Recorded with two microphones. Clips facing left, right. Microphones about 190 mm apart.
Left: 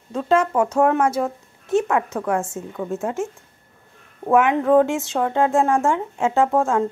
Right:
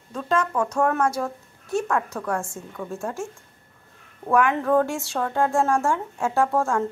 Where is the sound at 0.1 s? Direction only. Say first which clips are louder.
Left 5 dB; 25° left (ahead or behind).